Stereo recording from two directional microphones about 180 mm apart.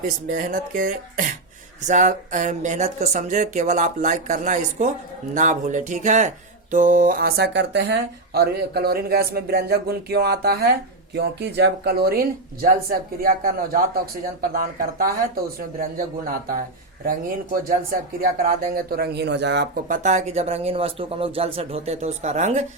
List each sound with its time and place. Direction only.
0.3 s speech: 50° right (ahead or behind)
18.2 s speech: 55° right (ahead or behind); by 19.8 s 70° right (ahead or behind)
19.9 s speech: 45° right (ahead or behind)